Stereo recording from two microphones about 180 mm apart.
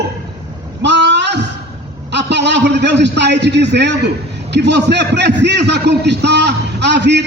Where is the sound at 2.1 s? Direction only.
70° right (ahead or behind).